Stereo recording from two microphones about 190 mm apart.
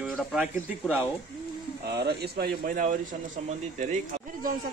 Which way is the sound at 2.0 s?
55° right (ahead or behind).